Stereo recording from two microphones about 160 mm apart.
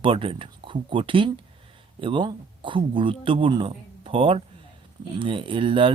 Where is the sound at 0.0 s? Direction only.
35° right (ahead or behind).